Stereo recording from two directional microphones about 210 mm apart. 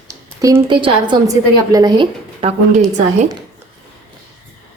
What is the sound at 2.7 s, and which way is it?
Speech, 35° right (ahead or behind).